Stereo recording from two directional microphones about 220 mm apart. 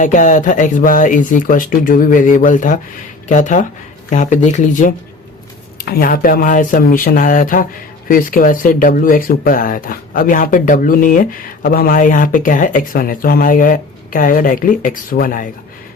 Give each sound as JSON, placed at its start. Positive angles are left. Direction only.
{"t": 0.0, "sound": "speech", "side_deg": 35}